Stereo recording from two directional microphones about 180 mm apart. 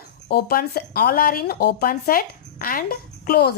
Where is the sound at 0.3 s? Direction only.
60° left (ahead or behind).